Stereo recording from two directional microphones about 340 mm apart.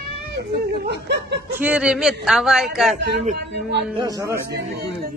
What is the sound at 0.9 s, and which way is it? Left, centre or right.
Snicker, right.